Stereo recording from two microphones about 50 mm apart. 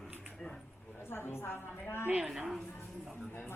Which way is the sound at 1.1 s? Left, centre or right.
Left.